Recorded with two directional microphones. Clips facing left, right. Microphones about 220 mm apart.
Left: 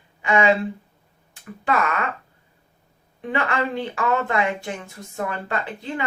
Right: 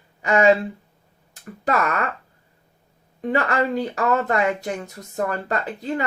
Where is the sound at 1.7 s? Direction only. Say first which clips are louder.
Right 1 dB; 40° right (ahead or behind).